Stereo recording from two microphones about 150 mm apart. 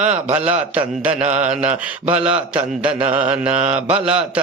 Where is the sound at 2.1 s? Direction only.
10° right (ahead or behind).